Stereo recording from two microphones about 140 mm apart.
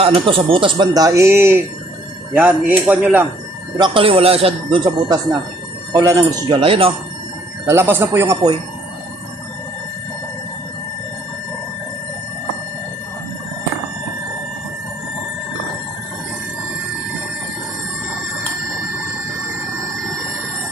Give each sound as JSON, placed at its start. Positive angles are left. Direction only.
{"t": 0.0, "sound": "speech", "side_deg": -40}
{"t": 3.8, "sound": "speech", "side_deg": -35}
{"t": 5.0, "sound": "speech", "side_deg": -25}
{"t": 6.6, "sound": "speech", "side_deg": -40}
{"t": 7.7, "sound": "speech", "side_deg": -15}